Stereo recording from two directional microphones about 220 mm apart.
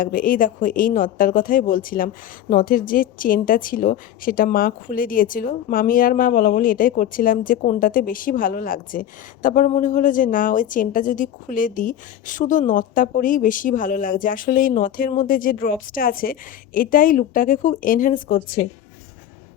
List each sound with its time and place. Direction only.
0.0 s a woman's voice: 40° left (ahead or behind)